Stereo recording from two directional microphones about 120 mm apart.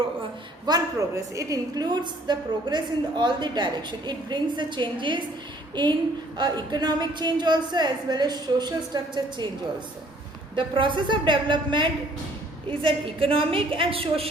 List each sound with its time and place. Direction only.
0.6 s a woman's voice: 30° right (ahead or behind)
6.3 s a woman's voice: 35° right (ahead or behind)
10.5 s a woman's voice: 45° right (ahead or behind)